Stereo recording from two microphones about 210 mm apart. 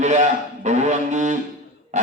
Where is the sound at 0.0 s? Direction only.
35° right (ahead or behind).